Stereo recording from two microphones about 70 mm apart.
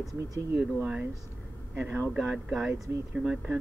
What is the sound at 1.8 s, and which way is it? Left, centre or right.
Speech, right.